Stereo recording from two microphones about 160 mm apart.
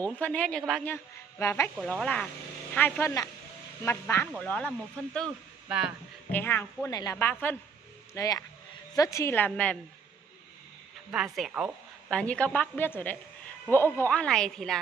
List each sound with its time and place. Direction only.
0.0 s a woman's voice: 10° left (ahead or behind)
1.4 s a woman's voice: 15° left (ahead or behind)
2.0 s a woman's voice: 5° left (ahead or behind)
5.7 s speech: 5° right (ahead or behind)
6.3 s a woman's voice: 10° left (ahead or behind)
11.6 s a woman's voice: 15° right (ahead or behind)
12.1 s a woman's voice: 5° left (ahead or behind)